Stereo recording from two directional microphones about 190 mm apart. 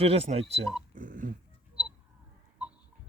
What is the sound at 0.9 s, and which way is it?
Dog, 45° right (ahead or behind).